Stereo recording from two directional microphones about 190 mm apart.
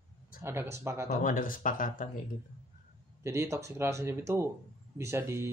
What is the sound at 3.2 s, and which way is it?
Speech, 15° right (ahead or behind).